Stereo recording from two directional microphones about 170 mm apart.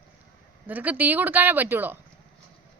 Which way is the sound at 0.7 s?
10° right (ahead or behind).